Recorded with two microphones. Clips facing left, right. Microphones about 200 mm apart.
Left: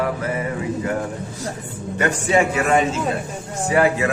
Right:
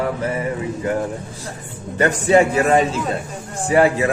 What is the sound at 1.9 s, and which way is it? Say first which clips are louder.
A man's voice: right 4 dB; 35° right (ahead or behind).